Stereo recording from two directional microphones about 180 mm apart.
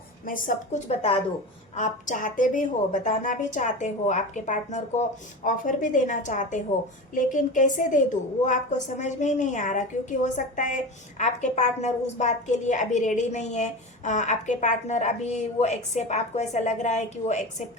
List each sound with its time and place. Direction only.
0.3 s a woman's voice: 50° left (ahead or behind)